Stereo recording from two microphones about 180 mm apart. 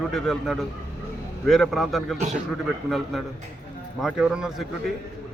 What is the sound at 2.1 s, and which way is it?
Speech, 40° right (ahead or behind).